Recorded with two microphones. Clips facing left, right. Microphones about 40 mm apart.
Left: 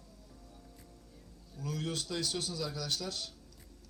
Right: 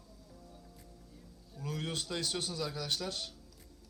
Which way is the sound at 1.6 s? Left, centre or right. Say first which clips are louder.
Left 1 dB; right.